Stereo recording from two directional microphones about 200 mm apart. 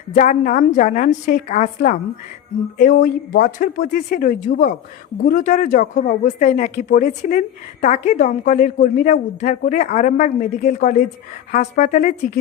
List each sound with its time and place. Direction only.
0.1 s speech: 40° left (ahead or behind)